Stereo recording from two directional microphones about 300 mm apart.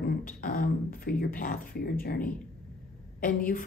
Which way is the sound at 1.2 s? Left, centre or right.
Left.